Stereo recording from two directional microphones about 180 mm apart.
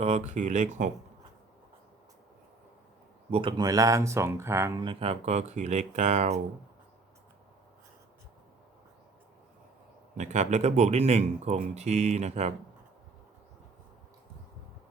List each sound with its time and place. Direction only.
0.0 s speech: 40° right (ahead or behind)
3.3 s speech: 25° right (ahead or behind)
10.2 s speech: 40° right (ahead or behind)